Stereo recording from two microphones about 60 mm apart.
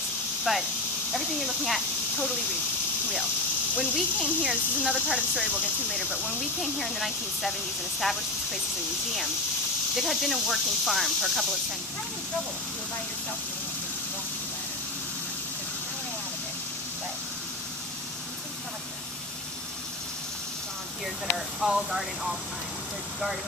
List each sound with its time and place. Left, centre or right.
0.5 s speech: centre
3.7 s speech: centre
6.0 s speech: right
6.6 s speech: centre
9.9 s speech: centre
21.5 s speech: centre